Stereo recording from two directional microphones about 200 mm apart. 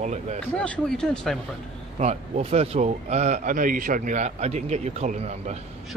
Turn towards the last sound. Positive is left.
turn(degrees=-35)  # may be behind; listen again after turning